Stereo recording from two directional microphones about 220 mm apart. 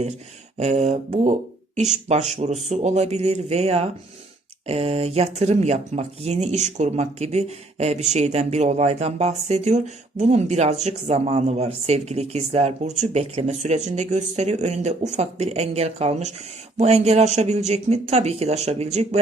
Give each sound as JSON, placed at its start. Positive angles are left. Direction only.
{"t": 0.5, "sound": "speech", "side_deg": -30}